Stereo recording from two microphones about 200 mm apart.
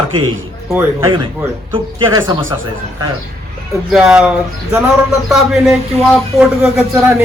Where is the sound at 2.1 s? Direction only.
20° right (ahead or behind).